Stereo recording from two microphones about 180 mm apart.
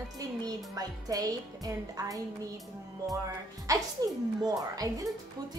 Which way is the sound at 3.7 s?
20° right (ahead or behind).